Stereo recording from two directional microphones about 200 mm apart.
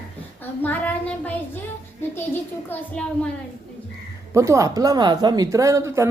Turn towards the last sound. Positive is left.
turn(degrees=-15)  # may be behind; listen again after turning